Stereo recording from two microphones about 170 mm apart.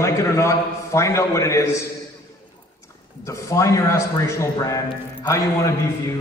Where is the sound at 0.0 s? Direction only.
15° left (ahead or behind).